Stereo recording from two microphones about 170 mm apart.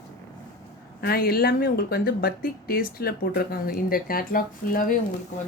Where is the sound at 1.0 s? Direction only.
60° left (ahead or behind).